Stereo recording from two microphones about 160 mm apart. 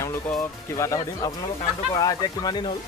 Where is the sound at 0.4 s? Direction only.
20° left (ahead or behind).